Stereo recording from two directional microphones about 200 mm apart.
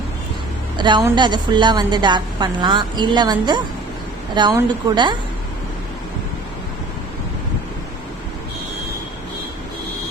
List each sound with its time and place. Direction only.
0.8 s a woman's voice: 20° right (ahead or behind)